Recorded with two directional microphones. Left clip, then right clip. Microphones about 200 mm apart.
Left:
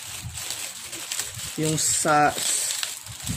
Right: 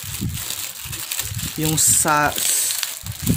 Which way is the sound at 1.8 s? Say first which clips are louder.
Right 2 dB; 50° right (ahead or behind).